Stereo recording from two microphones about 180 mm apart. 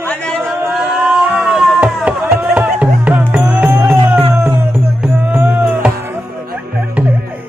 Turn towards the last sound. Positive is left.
turn(degrees=-10)  # may be behind; listen again after turning